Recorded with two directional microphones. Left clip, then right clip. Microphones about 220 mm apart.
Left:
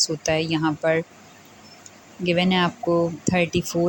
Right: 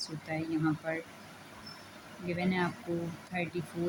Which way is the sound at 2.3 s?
35° left (ahead or behind).